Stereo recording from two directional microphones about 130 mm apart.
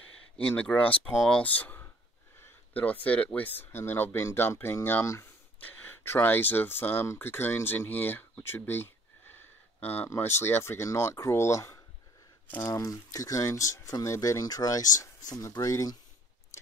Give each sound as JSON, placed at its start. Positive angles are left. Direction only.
{"t": 0.6, "sound": "speech", "side_deg": 10}
{"t": 1.4, "sound": "speech", "side_deg": 10}